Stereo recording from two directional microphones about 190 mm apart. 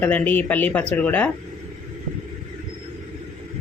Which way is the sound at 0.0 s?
10° left (ahead or behind).